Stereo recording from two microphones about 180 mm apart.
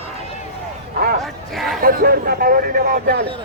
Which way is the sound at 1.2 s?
Centre (ahead or behind).